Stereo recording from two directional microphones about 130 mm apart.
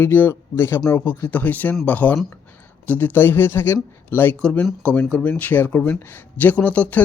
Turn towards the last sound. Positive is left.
turn(degrees=10)  # may be behind; listen again after turning